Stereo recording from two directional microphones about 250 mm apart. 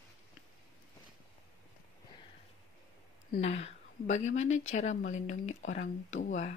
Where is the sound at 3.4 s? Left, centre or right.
Left.